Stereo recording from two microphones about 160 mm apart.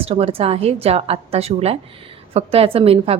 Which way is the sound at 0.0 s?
35° right (ahead or behind).